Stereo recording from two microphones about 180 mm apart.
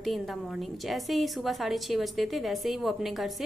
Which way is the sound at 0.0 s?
Centre (ahead or behind).